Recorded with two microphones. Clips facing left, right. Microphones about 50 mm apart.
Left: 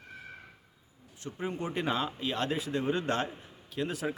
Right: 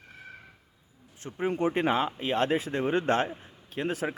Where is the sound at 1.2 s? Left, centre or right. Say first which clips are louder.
Right 7 dB; right.